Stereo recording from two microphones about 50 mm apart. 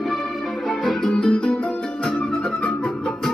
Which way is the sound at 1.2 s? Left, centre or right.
Centre.